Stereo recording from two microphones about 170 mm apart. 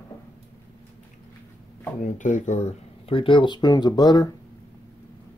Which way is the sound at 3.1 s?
30° left (ahead or behind).